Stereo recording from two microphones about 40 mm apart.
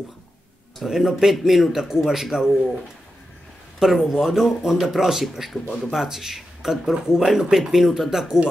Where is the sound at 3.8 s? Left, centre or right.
Centre.